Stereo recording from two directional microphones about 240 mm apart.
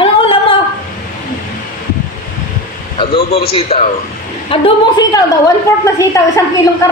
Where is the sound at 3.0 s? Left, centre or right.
Left.